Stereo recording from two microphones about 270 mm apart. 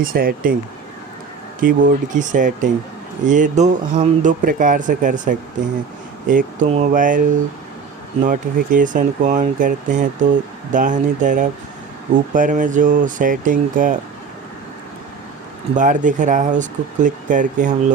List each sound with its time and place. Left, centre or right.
0.0 s speech: right
1.6 s speech: right
15.7 s speech: right